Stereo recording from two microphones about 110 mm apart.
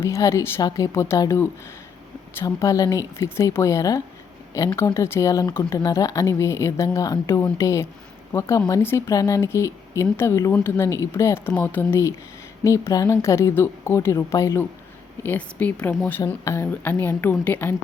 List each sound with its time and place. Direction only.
0.0 s speech: 25° left (ahead or behind)
2.4 s speech: 30° left (ahead or behind)
4.9 s speech: 25° left (ahead or behind)
15.2 s a woman's voice: 15° left (ahead or behind)
16.4 s speech: 25° left (ahead or behind)